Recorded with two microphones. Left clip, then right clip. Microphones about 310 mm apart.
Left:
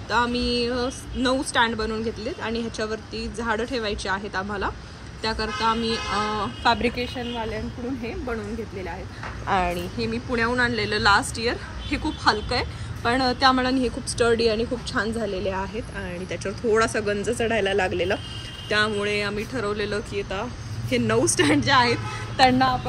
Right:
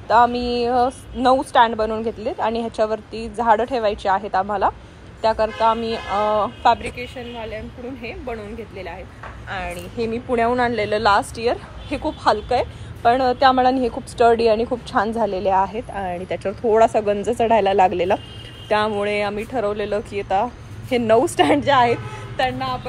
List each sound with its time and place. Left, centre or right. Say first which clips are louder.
0.1 s a woman's voice: right 7 dB; centre
9.5 s a woman's voice: left 5 dB; centre
10.3 s a woman's voice: right 4 dB; centre